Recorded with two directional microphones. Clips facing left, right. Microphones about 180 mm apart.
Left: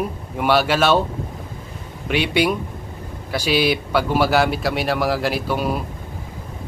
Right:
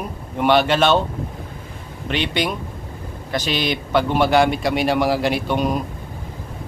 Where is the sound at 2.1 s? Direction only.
10° left (ahead or behind).